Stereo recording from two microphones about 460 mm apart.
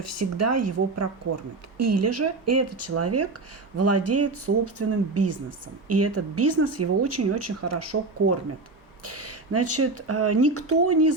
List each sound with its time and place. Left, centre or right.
0.0 s speech: right